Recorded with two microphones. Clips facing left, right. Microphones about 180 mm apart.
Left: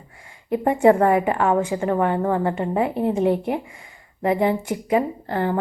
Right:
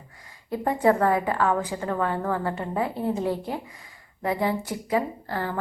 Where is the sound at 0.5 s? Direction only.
25° left (ahead or behind).